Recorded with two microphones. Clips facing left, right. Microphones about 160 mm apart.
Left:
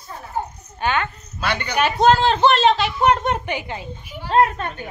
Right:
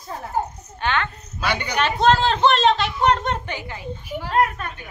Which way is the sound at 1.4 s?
10° right (ahead or behind).